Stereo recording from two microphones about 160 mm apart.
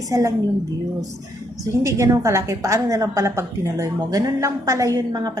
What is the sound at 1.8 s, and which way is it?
A woman's voice, 20° right (ahead or behind).